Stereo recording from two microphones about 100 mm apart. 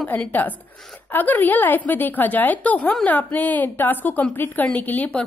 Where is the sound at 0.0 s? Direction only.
15° left (ahead or behind).